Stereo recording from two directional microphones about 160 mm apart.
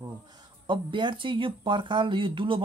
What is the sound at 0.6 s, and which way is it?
Speech, 30° right (ahead or behind).